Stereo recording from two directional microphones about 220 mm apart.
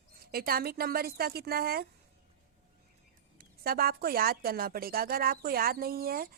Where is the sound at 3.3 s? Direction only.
45° right (ahead or behind).